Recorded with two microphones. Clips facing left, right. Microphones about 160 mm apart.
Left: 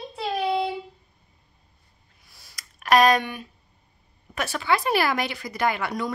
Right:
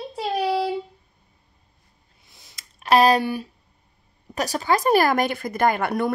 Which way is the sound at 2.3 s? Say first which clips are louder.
Left 1 dB; 20° right (ahead or behind).